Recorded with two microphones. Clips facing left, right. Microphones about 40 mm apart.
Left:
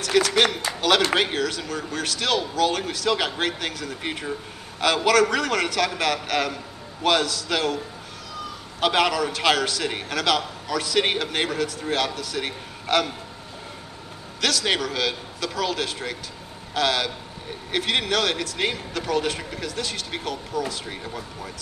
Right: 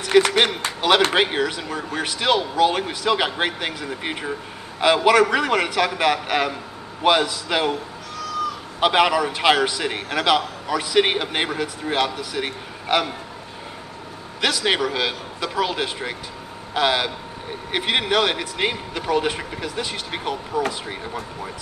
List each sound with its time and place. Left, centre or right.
0.0 s a man's voice: right
14.4 s a man's voice: centre